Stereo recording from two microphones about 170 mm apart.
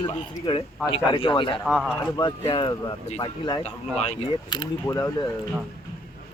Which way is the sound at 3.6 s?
40° left (ahead or behind).